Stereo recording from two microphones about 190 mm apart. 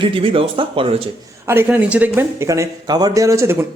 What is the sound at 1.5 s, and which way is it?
Speech, 10° right (ahead or behind).